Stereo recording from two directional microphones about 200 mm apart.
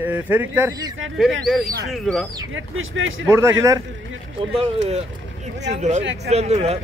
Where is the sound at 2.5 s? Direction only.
75° right (ahead or behind).